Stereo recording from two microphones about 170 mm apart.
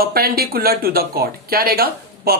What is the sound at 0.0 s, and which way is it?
Speech, 65° right (ahead or behind).